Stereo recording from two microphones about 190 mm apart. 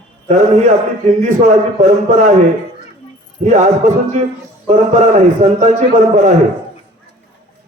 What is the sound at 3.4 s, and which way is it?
A man's voice, 40° right (ahead or behind).